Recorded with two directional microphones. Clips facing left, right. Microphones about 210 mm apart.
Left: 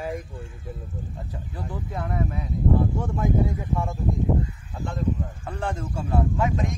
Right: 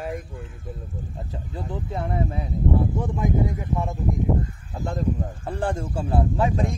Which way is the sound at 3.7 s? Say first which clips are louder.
Even; 15° right (ahead or behind).